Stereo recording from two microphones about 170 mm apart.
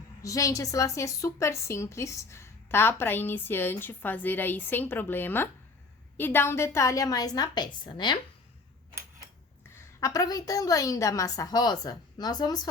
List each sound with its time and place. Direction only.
0.2 s a woman's voice: 20° left (ahead or behind)
9.7 s a woman's voice: 20° left (ahead or behind)